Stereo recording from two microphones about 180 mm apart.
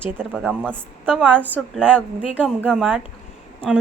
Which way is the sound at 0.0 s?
10° right (ahead or behind).